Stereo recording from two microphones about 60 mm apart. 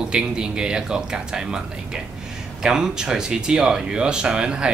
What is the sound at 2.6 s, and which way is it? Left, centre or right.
Speech, centre.